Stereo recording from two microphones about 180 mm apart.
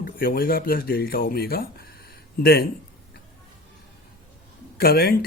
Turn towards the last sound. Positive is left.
turn(degrees=55)  # may be behind; listen again after turning